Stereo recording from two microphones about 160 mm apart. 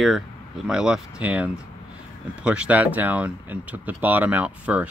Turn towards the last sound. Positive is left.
turn(degrees=-10)  # may be behind; listen again after turning